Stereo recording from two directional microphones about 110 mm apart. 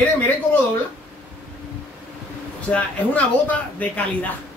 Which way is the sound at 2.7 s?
15° left (ahead or behind).